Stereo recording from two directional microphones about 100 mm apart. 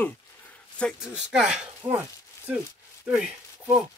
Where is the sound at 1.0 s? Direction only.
5° right (ahead or behind).